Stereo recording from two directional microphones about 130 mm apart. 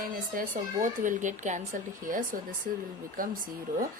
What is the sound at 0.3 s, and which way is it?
Speech, 85° right.